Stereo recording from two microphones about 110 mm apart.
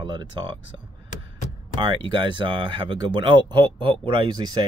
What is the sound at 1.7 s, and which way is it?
Speech, 45° right (ahead or behind).